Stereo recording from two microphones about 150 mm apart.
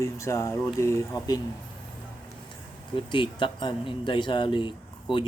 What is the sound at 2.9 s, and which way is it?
Speech, 35° left (ahead or behind).